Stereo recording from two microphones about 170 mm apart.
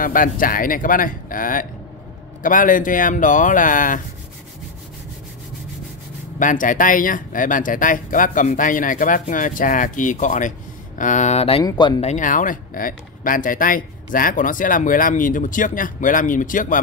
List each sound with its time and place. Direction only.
0.0 s speech: 55° left (ahead or behind)
6.4 s speech: 50° left (ahead or behind)
11.6 s speech: 25° left (ahead or behind)
12.0 s speech: 45° left (ahead or behind)